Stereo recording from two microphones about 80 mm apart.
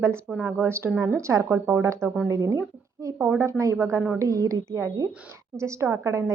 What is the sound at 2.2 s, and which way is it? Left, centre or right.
A woman's voice, right.